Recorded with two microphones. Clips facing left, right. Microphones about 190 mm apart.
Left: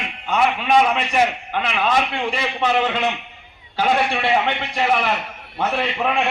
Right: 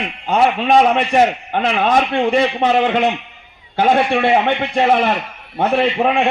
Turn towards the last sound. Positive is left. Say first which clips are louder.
# right 7 dB
turn(degrees=-50)  # may be behind; listen again after turning